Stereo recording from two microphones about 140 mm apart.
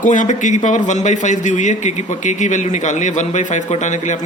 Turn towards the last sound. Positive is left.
turn(degrees=60)  # may be behind; listen again after turning